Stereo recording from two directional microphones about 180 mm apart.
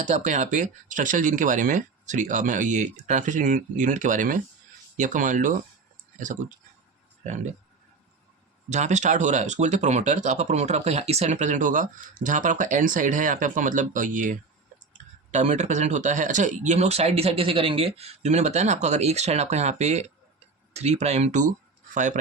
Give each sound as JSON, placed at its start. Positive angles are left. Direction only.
{"t": 0.0, "sound": "speech", "side_deg": -40}
{"t": 8.7, "sound": "speech", "side_deg": -40}